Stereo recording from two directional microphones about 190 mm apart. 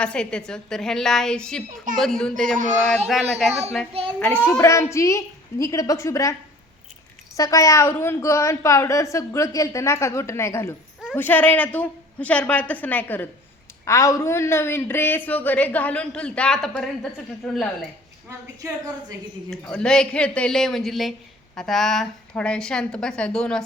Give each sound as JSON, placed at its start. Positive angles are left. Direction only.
{"t": 0.0, "sound": "a man's voice", "side_deg": 5}
{"t": 7.3, "sound": "a man's voice", "side_deg": 15}
{"t": 18.3, "sound": "a woman's voice", "side_deg": -15}
{"t": 19.5, "sound": "speech", "side_deg": 5}